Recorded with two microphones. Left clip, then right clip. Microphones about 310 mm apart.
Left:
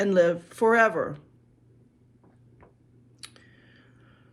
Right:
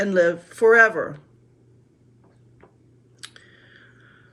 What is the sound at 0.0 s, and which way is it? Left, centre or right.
Speech, centre.